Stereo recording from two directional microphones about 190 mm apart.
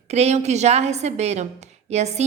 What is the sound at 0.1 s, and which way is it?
A woman's voice, 35° right (ahead or behind).